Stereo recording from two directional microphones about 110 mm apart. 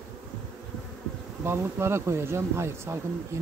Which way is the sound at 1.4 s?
20° right (ahead or behind).